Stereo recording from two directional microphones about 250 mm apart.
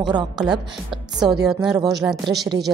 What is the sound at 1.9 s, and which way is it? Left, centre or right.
Speech, centre.